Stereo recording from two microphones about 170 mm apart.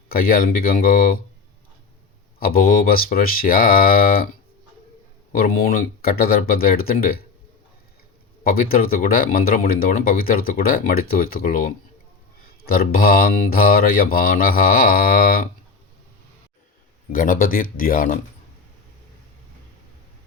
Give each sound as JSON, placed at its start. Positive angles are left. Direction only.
{"t": 0.1, "sound": "speech", "side_deg": 60}
{"t": 2.4, "sound": "speech", "side_deg": 60}
{"t": 5.3, "sound": "speech", "side_deg": 55}
{"t": 8.4, "sound": "speech", "side_deg": 60}
{"t": 17.1, "sound": "speech", "side_deg": 55}